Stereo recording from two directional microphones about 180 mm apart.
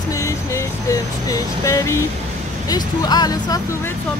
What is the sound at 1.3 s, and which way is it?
Speech, 20° left (ahead or behind).